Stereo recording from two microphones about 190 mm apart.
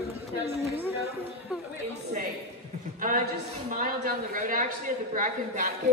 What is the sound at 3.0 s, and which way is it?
A man's voice, 45° right (ahead or behind).